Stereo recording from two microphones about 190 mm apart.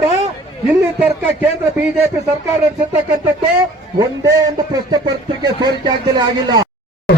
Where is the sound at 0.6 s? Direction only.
10° right (ahead or behind).